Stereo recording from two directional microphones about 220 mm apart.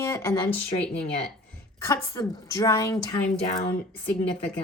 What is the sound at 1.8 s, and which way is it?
A woman's voice, 15° left (ahead or behind).